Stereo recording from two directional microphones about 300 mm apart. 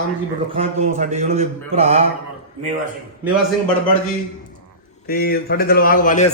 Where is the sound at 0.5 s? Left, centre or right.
Right.